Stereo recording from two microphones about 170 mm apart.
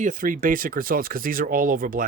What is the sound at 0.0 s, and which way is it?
Speech, 50° right (ahead or behind).